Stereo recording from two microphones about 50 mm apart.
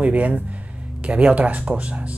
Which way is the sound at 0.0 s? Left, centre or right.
Right.